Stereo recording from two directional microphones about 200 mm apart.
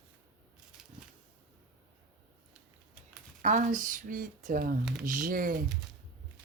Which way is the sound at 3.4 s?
40° right (ahead or behind).